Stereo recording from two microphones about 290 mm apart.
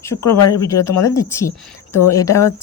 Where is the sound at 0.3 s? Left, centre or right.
Left.